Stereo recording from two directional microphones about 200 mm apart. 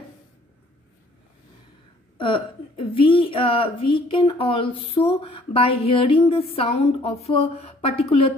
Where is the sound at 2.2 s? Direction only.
25° left (ahead or behind).